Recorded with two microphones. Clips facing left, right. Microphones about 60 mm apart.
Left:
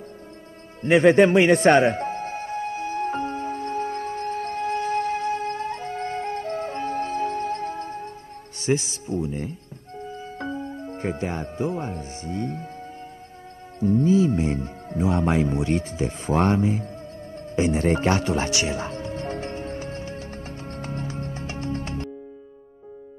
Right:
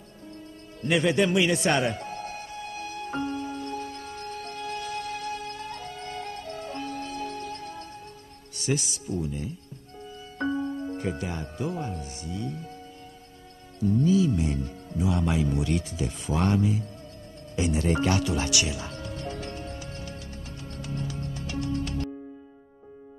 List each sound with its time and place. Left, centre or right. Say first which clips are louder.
0.8 s music: left 8 dB; left
8.5 s speech: left 5 dB; left
13.7 s music: left 4 dB; left